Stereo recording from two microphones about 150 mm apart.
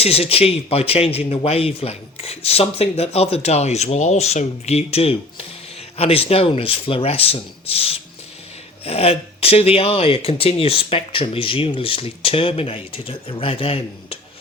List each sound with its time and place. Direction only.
0.0 s speech: 40° left (ahead or behind)